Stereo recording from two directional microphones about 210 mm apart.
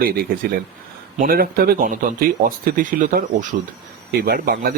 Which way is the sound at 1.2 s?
45° right (ahead or behind).